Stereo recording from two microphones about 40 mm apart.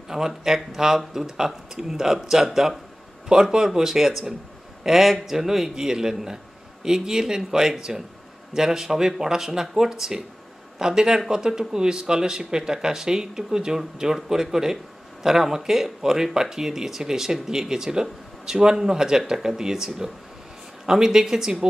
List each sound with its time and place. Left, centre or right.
0.1 s speech: centre